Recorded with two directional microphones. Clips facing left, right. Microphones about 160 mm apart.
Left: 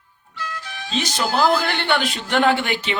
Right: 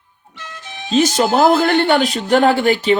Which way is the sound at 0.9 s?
45° right (ahead or behind).